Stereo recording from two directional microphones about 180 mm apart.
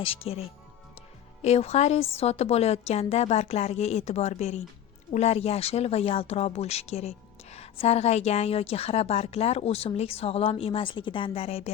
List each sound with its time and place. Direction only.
0.2 s speech: 35° left (ahead or behind)